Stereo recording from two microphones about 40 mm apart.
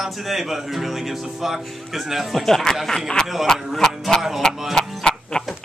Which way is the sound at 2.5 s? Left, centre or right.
Centre.